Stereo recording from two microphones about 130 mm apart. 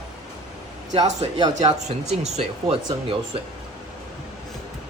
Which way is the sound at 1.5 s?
55° right (ahead or behind).